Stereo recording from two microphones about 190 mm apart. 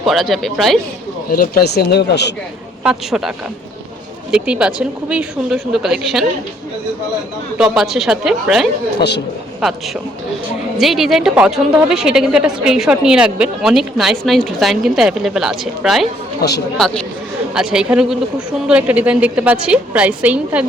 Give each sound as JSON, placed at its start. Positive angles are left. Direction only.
{"t": 0.0, "sound": "a woman's voice", "side_deg": 0}
{"t": 1.3, "sound": "speech", "side_deg": 55}
{"t": 2.8, "sound": "a woman's voice", "side_deg": 0}
{"t": 7.6, "sound": "a woman's voice", "side_deg": 0}
{"t": 9.0, "sound": "speech", "side_deg": 60}
{"t": 9.6, "sound": "a woman's voice", "side_deg": 0}
{"t": 16.4, "sound": "speech", "side_deg": 60}
{"t": 16.7, "sound": "a woman's voice", "side_deg": 0}